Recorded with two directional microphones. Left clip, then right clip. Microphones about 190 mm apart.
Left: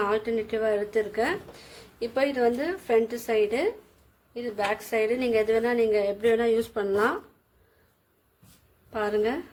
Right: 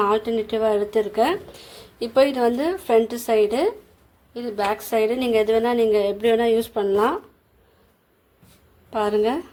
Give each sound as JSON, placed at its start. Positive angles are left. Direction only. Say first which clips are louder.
{"t": 0.0, "sound": "speech", "louder": "right 6 dB", "side_deg": -25}
{"t": 8.9, "sound": "speech", "louder": "right 5 dB", "side_deg": -20}